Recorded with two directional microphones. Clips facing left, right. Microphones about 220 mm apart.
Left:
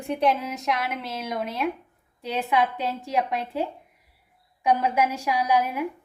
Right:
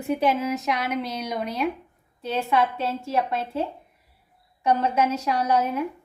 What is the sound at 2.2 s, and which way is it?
A woman's voice, 15° left (ahead or behind).